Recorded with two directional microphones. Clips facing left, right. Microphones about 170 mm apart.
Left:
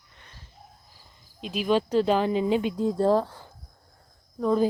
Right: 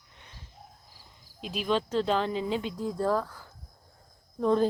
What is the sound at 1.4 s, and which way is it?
Speech, centre (ahead or behind).